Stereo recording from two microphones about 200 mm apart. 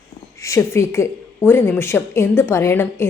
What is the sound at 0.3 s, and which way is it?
A woman's voice, 15° left (ahead or behind).